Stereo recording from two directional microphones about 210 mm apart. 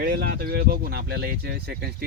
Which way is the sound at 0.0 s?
50° right (ahead or behind).